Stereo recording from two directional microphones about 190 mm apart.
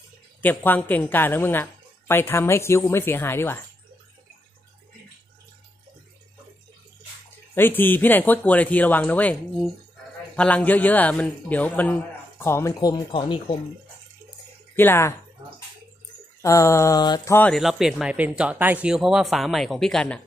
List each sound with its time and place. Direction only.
0.4 s a man's voice: 10° left (ahead or behind)
7.5 s a man's voice: 10° left (ahead or behind); by 13.6 s 25° left (ahead or behind)
14.8 s a man's voice: 10° left (ahead or behind)
16.4 s a man's voice: 15° left (ahead or behind)
17.6 s speech: centre (ahead or behind)